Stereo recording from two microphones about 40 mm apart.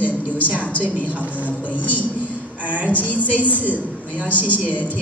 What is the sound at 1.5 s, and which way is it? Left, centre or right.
A woman's voice, left.